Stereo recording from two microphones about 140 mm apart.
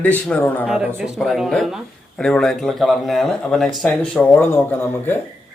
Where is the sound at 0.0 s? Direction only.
10° left (ahead or behind).